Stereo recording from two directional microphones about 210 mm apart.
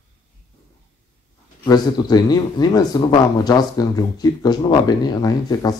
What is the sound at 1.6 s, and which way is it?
Speech, 20° left (ahead or behind).